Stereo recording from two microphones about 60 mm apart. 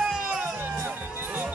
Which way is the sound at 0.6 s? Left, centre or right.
Right.